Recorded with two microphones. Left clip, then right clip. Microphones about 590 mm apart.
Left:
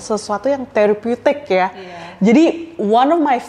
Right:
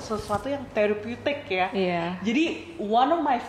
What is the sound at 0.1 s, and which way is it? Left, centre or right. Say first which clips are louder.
A woman's voice: left 11 dB; left.